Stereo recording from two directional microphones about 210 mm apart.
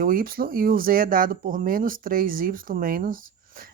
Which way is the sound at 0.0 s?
40° right (ahead or behind).